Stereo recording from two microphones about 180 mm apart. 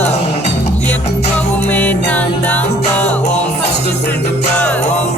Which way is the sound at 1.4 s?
10° left (ahead or behind).